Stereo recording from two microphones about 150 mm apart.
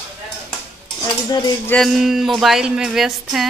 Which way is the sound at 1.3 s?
30° left (ahead or behind).